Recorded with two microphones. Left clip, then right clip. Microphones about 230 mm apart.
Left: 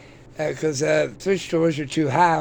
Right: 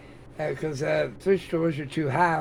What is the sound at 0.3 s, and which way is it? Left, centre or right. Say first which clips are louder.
Speech: left 6 dB; left.